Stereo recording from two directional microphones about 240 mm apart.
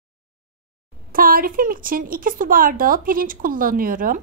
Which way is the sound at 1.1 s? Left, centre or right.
Right.